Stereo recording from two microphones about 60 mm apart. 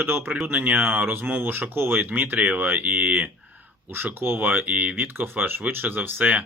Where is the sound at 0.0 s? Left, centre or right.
Right.